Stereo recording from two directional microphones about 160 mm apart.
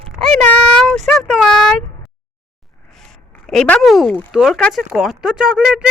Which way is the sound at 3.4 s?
5° left (ahead or behind).